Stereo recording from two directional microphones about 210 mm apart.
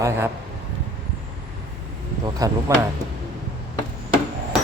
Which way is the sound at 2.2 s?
15° right (ahead or behind).